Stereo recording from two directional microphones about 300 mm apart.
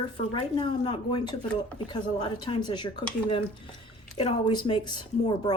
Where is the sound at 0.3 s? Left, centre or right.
Centre.